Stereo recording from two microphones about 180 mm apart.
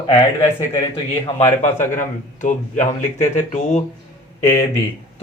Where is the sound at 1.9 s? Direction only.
45° left (ahead or behind).